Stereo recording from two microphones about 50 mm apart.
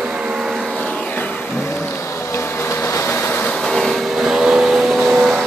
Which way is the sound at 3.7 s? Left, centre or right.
Centre.